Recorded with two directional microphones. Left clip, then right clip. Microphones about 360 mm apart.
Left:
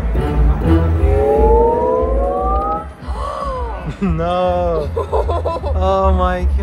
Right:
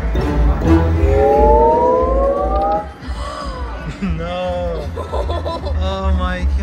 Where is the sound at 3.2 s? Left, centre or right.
Centre.